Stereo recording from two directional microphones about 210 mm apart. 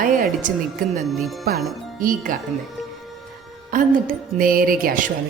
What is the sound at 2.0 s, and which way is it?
Music, 40° right (ahead or behind).